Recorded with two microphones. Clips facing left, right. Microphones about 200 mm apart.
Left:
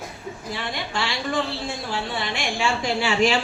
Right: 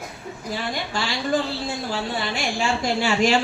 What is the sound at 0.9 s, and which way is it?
A woman's voice, 40° right (ahead or behind).